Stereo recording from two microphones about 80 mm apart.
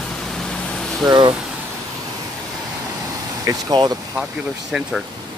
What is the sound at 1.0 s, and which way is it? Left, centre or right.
Speech, right.